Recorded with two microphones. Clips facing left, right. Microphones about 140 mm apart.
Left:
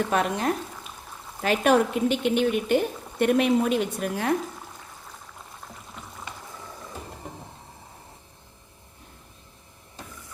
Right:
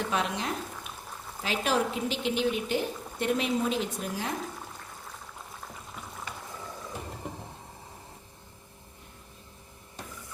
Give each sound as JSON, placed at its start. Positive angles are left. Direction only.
{"t": 0.1, "sound": "speech", "side_deg": 50}